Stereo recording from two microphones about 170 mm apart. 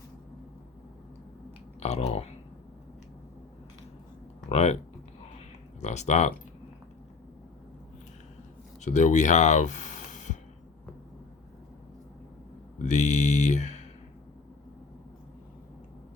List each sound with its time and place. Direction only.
1.8 s speech: 40° left (ahead or behind)
4.4 s speech: 40° left (ahead or behind)
5.8 s speech: 45° left (ahead or behind)
8.8 s speech: 45° left (ahead or behind)
12.8 s mantra: 45° left (ahead or behind)